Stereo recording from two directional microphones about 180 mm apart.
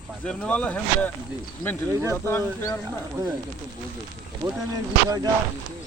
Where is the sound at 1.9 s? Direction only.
15° right (ahead or behind).